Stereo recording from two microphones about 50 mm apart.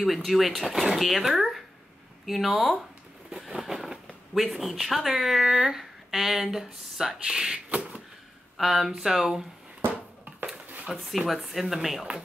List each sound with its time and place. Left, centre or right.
0.0 s speech: centre
3.3 s vehicle: centre
4.3 s speech: centre
7.7 s a sound: right
8.5 s speech: centre
9.8 s a sound: right
11.0 s speech: centre